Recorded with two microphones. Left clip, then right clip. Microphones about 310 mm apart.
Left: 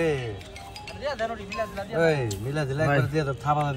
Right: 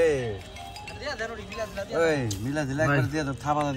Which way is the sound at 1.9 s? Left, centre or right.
Right.